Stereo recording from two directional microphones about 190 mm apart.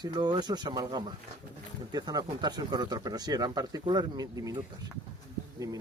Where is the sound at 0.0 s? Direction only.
20° right (ahead or behind).